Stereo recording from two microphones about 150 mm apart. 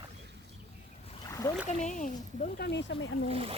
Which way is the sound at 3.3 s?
40° right (ahead or behind).